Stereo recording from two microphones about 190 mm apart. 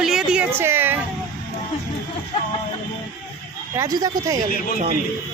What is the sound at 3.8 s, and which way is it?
Speech, 20° right (ahead or behind).